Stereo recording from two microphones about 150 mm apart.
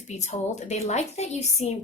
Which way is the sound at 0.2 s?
50° left (ahead or behind).